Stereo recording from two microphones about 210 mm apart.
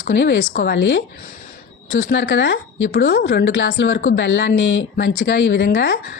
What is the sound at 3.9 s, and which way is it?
Speech, 40° left (ahead or behind).